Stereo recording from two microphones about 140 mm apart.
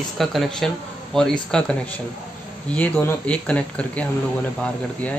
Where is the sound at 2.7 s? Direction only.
10° left (ahead or behind).